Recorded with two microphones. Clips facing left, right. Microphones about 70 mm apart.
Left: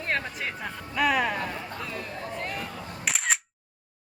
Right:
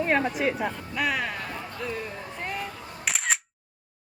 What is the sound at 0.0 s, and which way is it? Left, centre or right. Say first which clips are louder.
Speech: right 6 dB; centre.